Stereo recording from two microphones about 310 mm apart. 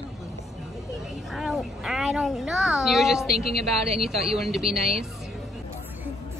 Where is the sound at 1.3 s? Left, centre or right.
Centre.